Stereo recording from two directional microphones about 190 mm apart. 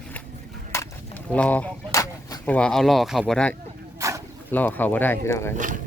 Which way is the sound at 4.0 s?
15° right (ahead or behind).